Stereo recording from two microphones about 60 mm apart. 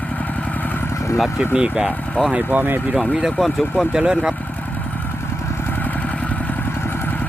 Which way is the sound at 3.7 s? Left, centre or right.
Centre.